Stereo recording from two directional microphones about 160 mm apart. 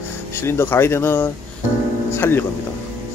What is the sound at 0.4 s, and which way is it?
Speech, 15° left (ahead or behind).